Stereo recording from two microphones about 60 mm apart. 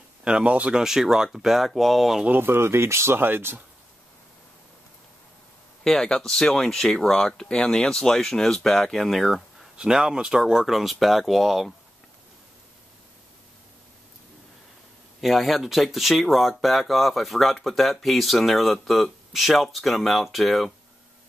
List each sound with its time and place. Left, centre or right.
0.2 s speech: centre
0.8 s speech: centre
2.2 s speech: right
5.9 s speech: centre
9.8 s speech: centre
15.1 s speech: centre